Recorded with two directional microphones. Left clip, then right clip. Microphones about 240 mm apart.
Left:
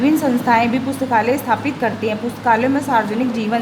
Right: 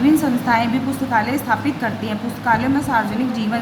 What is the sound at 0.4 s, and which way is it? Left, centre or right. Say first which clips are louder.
A woman's voice: left 3 dB; left.